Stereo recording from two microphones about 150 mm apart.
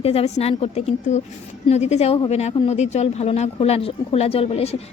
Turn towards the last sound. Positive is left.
turn(degrees=40)  # may be behind; listen again after turning